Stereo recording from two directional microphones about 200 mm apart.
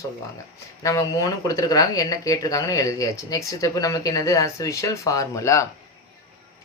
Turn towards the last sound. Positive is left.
turn(degrees=15)  # may be behind; listen again after turning